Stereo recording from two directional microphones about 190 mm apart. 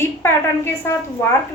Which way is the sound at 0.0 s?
10° left (ahead or behind).